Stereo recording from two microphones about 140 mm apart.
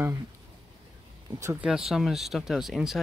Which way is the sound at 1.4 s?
15° right (ahead or behind).